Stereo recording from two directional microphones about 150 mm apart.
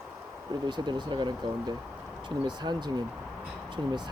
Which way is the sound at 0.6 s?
30° right (ahead or behind).